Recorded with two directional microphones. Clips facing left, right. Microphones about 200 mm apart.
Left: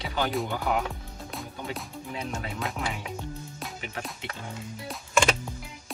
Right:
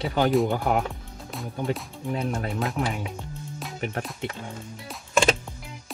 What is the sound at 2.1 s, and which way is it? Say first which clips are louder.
Speech: right 7 dB; 50° right (ahead or behind).